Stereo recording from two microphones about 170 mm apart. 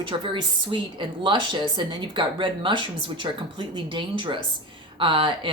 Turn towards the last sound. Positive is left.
turn(degrees=-30)  # may be behind; listen again after turning